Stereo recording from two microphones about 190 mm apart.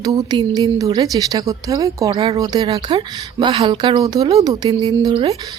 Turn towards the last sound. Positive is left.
turn(degrees=-25)  # may be behind; listen again after turning